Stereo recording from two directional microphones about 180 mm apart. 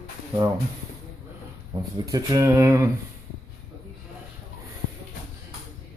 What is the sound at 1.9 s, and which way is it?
Speech, 20° right (ahead or behind).